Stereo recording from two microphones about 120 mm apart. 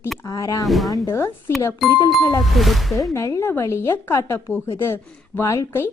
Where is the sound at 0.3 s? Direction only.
25° left (ahead or behind).